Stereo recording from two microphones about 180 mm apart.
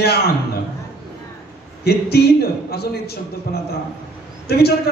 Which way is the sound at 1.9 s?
60° left (ahead or behind).